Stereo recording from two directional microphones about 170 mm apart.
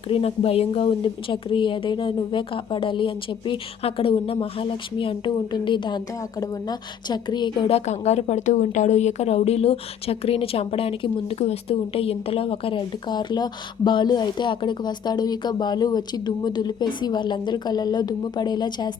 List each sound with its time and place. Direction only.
0.1 s a woman's voice: 35° left (ahead or behind)
7.9 s a woman's voice: 40° left (ahead or behind)